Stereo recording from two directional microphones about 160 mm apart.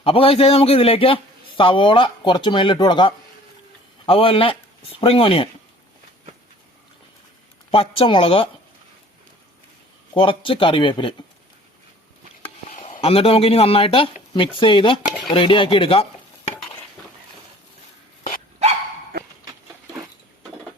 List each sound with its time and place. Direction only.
0.0 s a man's voice: 35° left (ahead or behind)
7.7 s a man's voice: 35° left (ahead or behind)
10.2 s a man's voice: 35° left (ahead or behind)
12.7 s a man's voice: 45° left (ahead or behind)